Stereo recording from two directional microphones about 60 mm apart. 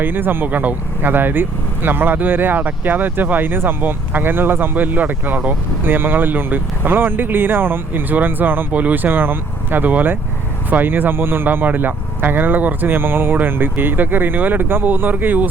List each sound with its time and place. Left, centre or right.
0.0 s speech: right